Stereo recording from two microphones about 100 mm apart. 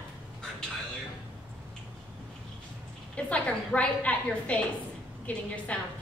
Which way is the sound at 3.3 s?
15° left (ahead or behind).